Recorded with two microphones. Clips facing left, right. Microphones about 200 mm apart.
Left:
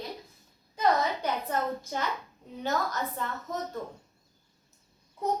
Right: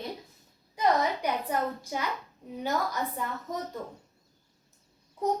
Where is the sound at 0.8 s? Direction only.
15° right (ahead or behind).